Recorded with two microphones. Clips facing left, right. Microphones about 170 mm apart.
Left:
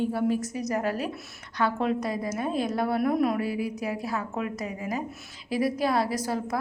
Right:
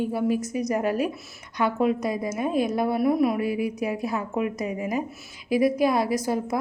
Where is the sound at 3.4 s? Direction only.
15° right (ahead or behind).